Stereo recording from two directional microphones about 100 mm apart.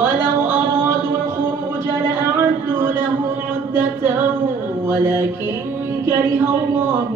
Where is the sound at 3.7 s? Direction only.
25° right (ahead or behind).